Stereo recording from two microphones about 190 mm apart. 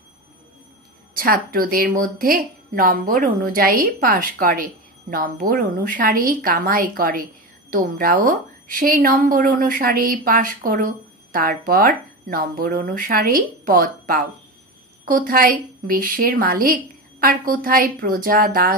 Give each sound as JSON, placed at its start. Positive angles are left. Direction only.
{"t": 1.2, "sound": "a woman's voice", "side_deg": -50}